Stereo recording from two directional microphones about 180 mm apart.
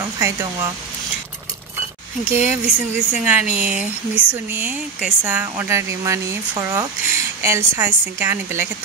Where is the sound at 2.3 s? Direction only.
10° right (ahead or behind).